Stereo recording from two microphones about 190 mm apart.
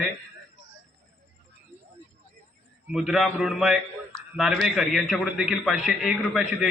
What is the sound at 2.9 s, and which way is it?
A man's voice, 5° right (ahead or behind).